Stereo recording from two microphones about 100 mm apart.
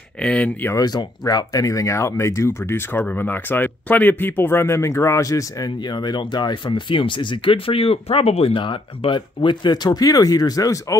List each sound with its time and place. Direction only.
0.2 s speech: 10° left (ahead or behind)
0.7 s speech: 40° left (ahead or behind)
5.8 s speech: 45° left (ahead or behind)